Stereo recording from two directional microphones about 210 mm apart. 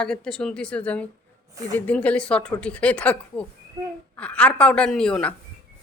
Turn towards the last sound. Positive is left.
turn(degrees=5)  # may be behind; listen again after turning